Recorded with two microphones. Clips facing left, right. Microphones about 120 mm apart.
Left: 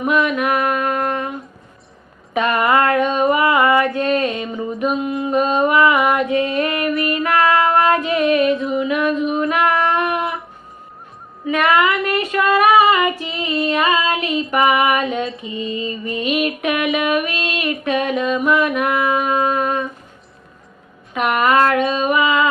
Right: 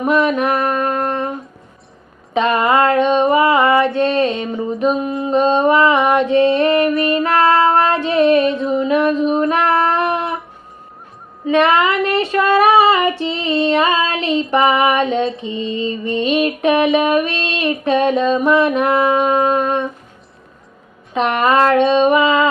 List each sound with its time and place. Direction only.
0.0 s a sound: 30° right (ahead or behind)
2.3 s female singing: 25° right (ahead or behind)
11.4 s female singing: 30° right (ahead or behind)
14.5 s music: 30° right (ahead or behind)
21.1 s music: 30° right (ahead or behind)